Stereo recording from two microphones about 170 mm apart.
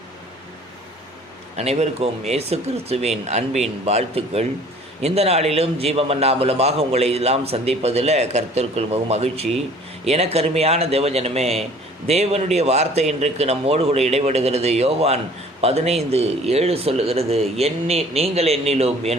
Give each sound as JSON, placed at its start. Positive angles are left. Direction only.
{"t": 1.5, "sound": "a man's voice", "side_deg": -40}